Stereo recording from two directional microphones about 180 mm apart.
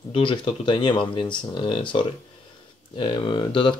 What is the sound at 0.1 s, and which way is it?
Speech, 25° left (ahead or behind).